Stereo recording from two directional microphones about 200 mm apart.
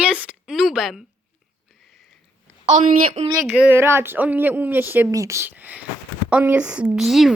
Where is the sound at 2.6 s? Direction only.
35° right (ahead or behind).